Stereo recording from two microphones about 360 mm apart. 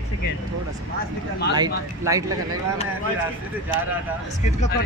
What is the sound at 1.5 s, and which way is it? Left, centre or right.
Speech, centre.